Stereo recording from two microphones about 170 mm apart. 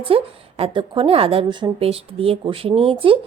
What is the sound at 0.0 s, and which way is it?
A woman's voice, 35° right (ahead or behind).